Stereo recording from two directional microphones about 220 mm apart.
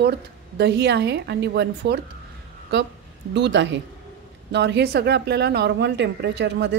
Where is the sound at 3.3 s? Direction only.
55° right (ahead or behind).